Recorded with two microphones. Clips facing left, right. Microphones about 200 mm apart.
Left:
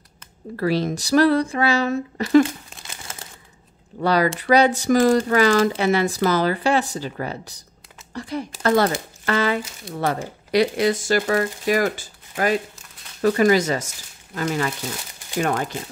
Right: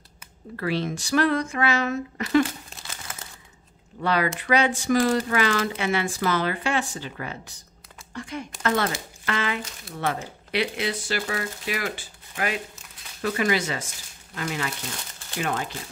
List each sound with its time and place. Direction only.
0.6 s speech: 40° left (ahead or behind)
4.0 s speech: 35° left (ahead or behind)